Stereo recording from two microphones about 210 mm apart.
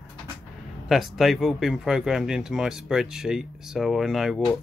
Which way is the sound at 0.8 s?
Centre (ahead or behind).